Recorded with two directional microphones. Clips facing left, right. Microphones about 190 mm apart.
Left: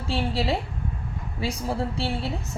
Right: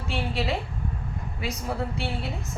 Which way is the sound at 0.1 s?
30° left (ahead or behind).